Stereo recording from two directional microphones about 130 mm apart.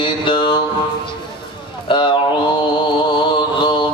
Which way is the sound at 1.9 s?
40° left (ahead or behind).